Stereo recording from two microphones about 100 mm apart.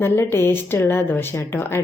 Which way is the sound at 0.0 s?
20° left (ahead or behind).